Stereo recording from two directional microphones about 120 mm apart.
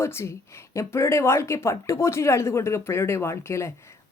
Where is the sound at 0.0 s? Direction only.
20° left (ahead or behind).